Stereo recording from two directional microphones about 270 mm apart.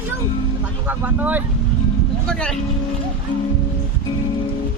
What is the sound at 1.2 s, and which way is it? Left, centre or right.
Speech, centre.